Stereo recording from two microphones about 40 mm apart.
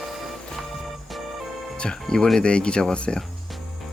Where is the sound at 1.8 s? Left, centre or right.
Centre.